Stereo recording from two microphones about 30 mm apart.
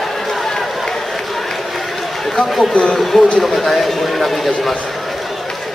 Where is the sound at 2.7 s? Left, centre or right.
Left.